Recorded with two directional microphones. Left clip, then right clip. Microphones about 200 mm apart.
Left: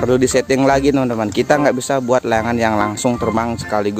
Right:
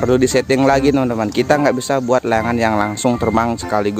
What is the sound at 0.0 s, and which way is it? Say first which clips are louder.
Speech: even; 5° right (ahead or behind).